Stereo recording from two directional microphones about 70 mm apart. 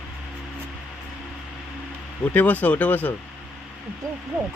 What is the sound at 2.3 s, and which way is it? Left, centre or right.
Speech, left.